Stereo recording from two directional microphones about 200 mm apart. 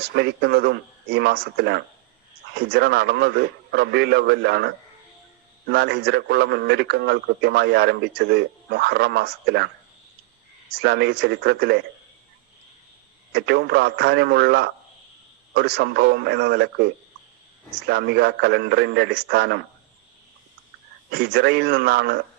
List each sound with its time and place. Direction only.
0.1 s a man's voice: 55° right (ahead or behind)
10.7 s a man's voice: 55° right (ahead or behind)
13.3 s a man's voice: 55° right (ahead or behind)
21.1 s a man's voice: 55° right (ahead or behind)